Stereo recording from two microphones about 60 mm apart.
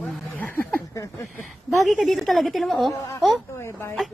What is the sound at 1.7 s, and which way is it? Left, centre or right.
A woman's voice, centre.